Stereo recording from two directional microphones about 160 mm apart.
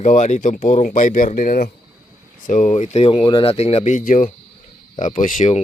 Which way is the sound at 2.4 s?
50° left (ahead or behind).